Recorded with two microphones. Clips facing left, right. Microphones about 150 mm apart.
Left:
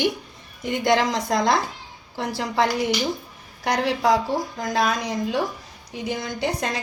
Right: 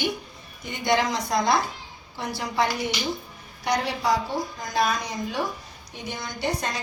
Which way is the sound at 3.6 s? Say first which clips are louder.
Left 4 dB; 90° left.